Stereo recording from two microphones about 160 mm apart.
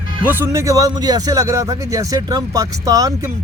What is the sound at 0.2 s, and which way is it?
Speech, 10° right (ahead or behind).